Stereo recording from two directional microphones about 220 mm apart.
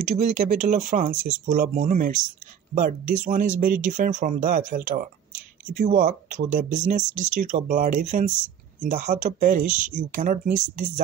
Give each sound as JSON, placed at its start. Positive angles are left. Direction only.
{"t": 0.1, "sound": "speech", "side_deg": -30}